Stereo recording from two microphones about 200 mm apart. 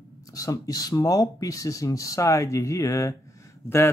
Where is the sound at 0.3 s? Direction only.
15° left (ahead or behind).